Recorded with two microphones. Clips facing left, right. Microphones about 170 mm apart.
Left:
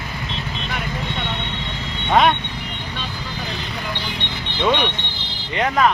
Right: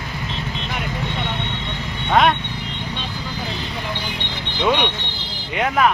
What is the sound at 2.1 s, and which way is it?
Speech, centre (ahead or behind).